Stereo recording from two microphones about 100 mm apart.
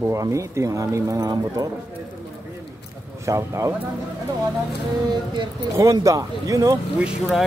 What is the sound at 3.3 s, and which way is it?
Speech, 30° right (ahead or behind).